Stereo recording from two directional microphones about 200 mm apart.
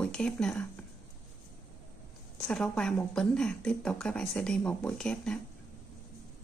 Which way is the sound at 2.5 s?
5° left (ahead or behind).